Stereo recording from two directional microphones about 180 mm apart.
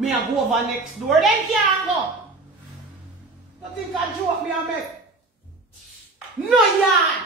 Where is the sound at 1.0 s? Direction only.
Centre (ahead or behind).